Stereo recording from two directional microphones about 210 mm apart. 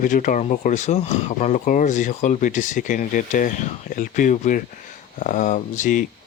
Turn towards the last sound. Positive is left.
turn(degrees=35)  # may be behind; listen again after turning